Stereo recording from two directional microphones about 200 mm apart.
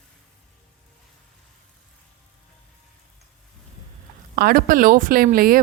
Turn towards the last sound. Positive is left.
turn(degrees=-50)  # may be behind; listen again after turning